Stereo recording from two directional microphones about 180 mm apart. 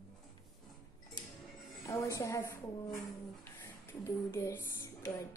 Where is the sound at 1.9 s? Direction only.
15° left (ahead or behind).